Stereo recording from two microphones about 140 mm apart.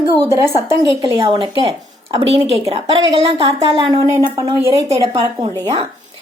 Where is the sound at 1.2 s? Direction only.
35° right (ahead or behind).